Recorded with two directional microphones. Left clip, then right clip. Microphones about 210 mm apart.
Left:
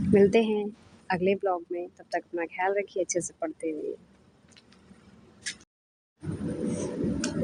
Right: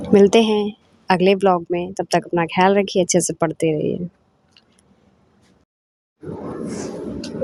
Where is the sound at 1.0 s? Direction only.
40° right (ahead or behind).